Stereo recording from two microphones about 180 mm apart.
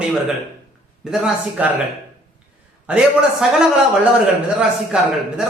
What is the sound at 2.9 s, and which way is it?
Speech, 5° right (ahead or behind).